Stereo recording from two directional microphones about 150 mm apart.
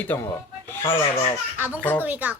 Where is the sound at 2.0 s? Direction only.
10° right (ahead or behind).